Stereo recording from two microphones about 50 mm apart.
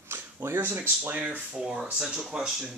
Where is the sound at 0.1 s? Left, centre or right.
Right.